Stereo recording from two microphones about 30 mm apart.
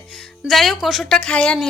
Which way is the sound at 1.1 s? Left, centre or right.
Left.